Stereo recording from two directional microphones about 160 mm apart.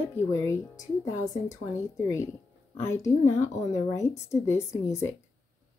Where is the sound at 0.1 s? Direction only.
20° left (ahead or behind).